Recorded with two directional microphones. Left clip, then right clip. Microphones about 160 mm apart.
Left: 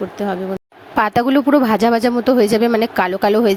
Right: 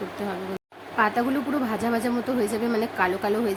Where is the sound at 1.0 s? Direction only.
90° left.